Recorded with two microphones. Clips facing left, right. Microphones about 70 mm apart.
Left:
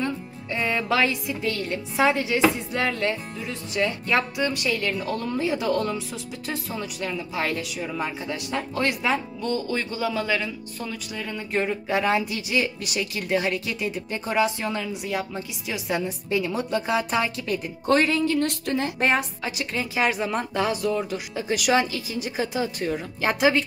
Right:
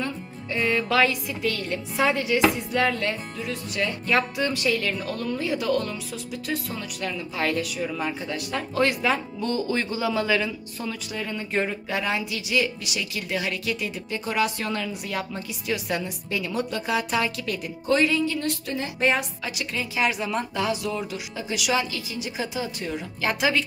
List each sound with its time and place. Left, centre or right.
0.0 s speech: centre
4.9 s speech: left
9.5 s speech: centre
11.9 s a woman's voice: left
17.8 s speech: left
18.9 s a woman's voice: left